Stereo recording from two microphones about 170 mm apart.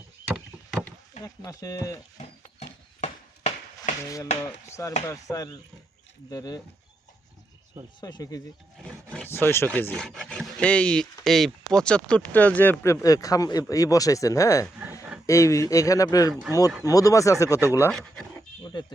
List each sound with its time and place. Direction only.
1.2 s speech: 20° left (ahead or behind)
2.4 s a sound: 40° left (ahead or behind)
4.0 s speech: 20° left (ahead or behind)
8.0 s speech: 20° left (ahead or behind)
8.8 s speech: 5° left (ahead or behind); by 16.3 s 20° left (ahead or behind)
16.3 s speech: 10° right (ahead or behind)
16.8 s speech: 20° left (ahead or behind)
18.7 s a sound: 25° left (ahead or behind)